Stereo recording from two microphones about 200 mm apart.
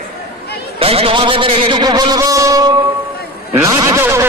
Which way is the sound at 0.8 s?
30° right (ahead or behind).